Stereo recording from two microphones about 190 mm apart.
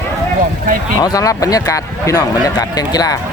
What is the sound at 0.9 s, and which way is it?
Speech, 20° left (ahead or behind).